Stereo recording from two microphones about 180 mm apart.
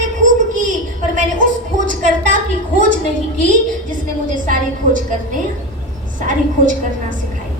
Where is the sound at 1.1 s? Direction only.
45° right (ahead or behind).